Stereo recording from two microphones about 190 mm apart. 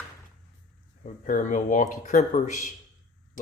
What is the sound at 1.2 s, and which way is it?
Speech, 45° left (ahead or behind).